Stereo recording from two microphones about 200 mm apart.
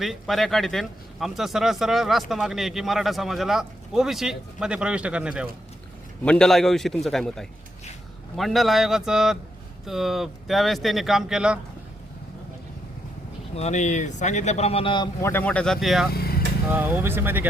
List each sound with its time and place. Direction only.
0.0 s speech: centre (ahead or behind)
13.6 s speech: 35° left (ahead or behind)
15.2 s speech: 10° left (ahead or behind); by 17.5 s 10° right (ahead or behind)